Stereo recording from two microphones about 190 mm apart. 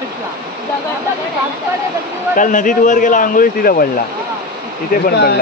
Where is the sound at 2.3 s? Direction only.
45° left (ahead or behind).